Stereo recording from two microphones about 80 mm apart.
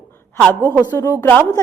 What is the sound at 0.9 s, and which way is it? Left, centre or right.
Speech, left.